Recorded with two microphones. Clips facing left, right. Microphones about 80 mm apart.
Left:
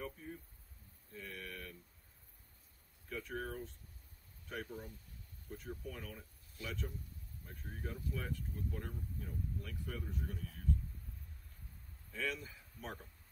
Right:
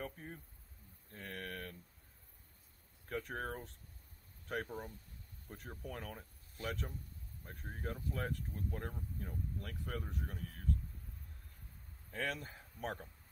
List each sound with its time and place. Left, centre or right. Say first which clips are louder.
0.0 s a sound: even; right
3.1 s speech: right 2 dB; right
12.1 s speech: right 1 dB; right